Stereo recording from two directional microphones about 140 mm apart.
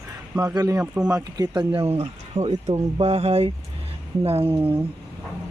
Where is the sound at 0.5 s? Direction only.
25° right (ahead or behind).